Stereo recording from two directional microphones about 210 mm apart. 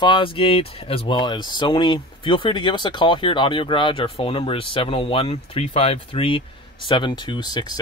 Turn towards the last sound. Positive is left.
turn(degrees=20)  # may be behind; listen again after turning